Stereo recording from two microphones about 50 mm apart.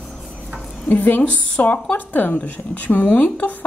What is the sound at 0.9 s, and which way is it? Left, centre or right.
Speech, left.